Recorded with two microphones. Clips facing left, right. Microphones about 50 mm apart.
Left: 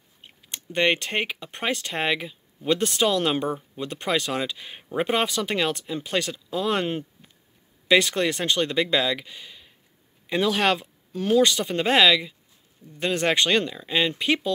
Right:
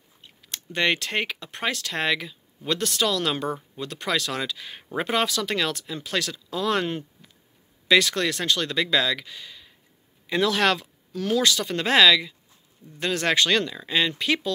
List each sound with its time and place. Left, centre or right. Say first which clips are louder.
0.7 s speech: left 1 dB; centre